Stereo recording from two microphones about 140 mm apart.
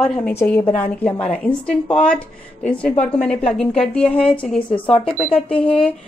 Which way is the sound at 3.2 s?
5° left (ahead or behind).